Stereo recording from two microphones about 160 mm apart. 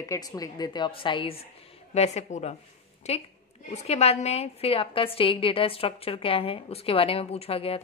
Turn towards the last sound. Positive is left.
turn(degrees=35)  # may be behind; listen again after turning